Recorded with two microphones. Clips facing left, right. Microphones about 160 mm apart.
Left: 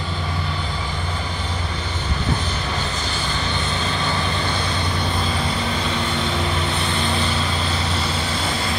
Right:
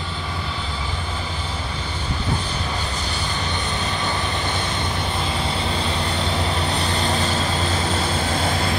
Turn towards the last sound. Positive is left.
turn(degrees=-40)  # may be behind; listen again after turning